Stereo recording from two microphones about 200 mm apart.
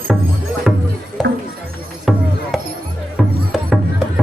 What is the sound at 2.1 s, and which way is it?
Music, centre (ahead or behind).